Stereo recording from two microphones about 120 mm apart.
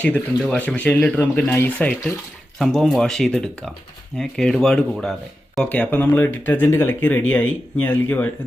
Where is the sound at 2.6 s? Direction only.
5° left (ahead or behind).